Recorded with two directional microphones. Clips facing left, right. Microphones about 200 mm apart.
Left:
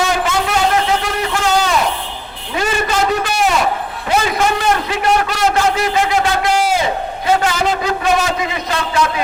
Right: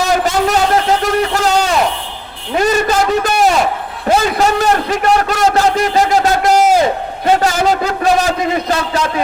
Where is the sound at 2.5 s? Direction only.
40° right (ahead or behind).